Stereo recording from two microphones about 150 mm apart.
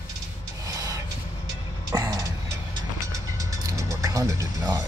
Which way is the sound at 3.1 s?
20° right (ahead or behind).